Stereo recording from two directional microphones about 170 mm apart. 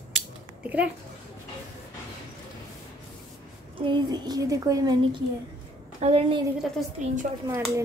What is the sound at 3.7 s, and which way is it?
A woman's voice, 30° right (ahead or behind).